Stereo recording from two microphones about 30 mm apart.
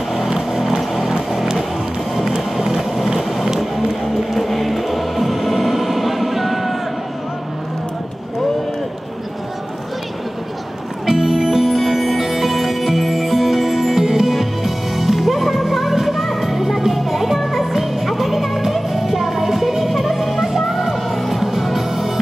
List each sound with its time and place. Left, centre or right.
0.1 s music: centre
2.1 s a sound: centre
3.4 s music: centre
11.1 s music: centre